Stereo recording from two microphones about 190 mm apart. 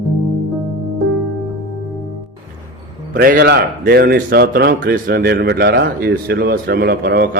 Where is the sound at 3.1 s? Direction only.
50° right (ahead or behind).